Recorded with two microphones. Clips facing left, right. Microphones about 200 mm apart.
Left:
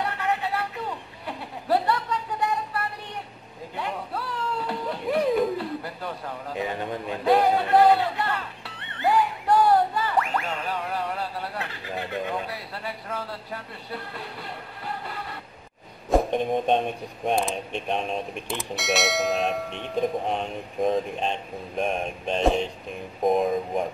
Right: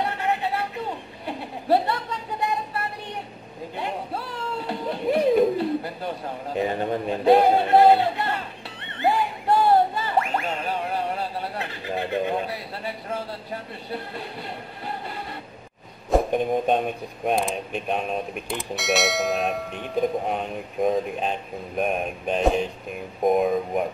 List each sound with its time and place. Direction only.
0.0 s a sound: 25° right (ahead or behind)
3.7 s vehicle: 25° right (ahead or behind)
4.6 s music: 25° right (ahead or behind)
6.6 s a man's voice: 35° right (ahead or behind)
9.0 s music: 25° right (ahead or behind)
16.1 s a sound: 5° right (ahead or behind)
17.3 s speech: centre (ahead or behind)